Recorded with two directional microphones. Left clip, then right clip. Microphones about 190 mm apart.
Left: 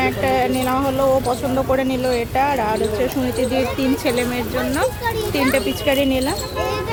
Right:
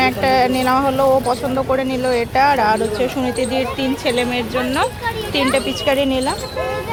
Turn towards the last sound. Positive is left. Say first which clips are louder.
# right 1 dB
turn(degrees=15)  # may be behind; listen again after turning